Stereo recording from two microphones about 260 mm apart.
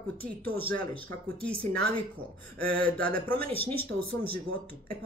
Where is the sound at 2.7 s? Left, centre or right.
Centre.